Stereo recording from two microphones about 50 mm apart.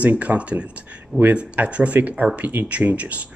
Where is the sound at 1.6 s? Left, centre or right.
Right.